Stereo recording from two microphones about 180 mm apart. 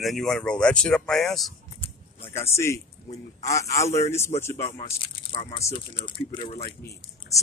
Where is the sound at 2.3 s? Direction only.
15° left (ahead or behind).